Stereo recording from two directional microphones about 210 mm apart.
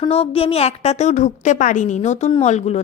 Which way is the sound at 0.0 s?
25° left (ahead or behind).